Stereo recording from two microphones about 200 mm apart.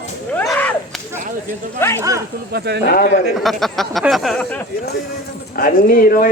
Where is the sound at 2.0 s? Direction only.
15° right (ahead or behind).